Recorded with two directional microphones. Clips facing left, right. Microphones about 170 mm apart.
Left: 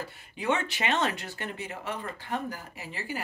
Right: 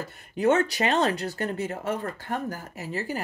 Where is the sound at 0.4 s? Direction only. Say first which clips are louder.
Right 7 dB; 40° right (ahead or behind).